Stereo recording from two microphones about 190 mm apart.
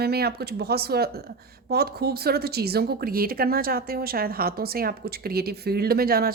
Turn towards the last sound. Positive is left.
turn(degrees=-50)  # may be behind; listen again after turning